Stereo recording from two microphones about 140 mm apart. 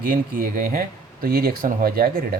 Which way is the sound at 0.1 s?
85° right.